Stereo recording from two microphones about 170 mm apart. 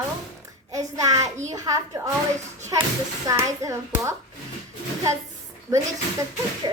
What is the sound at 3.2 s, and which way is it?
Speech, 20° right (ahead or behind).